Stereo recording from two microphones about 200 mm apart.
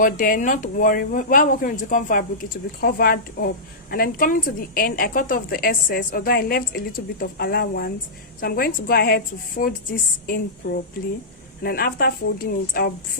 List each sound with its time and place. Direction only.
0.0 s a woman's voice: 40° left (ahead or behind)